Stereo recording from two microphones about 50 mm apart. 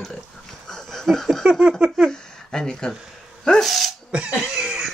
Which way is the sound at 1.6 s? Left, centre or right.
Centre.